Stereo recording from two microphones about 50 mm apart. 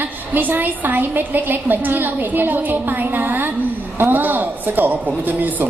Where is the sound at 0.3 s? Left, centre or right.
Right.